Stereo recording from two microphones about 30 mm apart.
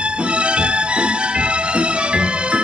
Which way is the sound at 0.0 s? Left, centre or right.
Right.